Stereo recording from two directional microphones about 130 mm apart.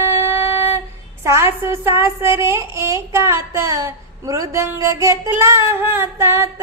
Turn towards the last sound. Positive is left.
turn(degrees=-20)  # may be behind; listen again after turning